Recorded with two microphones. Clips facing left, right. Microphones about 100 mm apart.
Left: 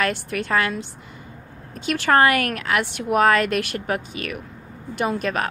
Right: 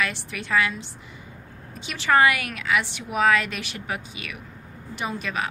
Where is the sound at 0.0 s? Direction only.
50° left (ahead or behind).